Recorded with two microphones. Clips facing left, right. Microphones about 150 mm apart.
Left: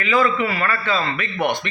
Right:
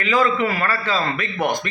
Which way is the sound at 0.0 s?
40° right (ahead or behind).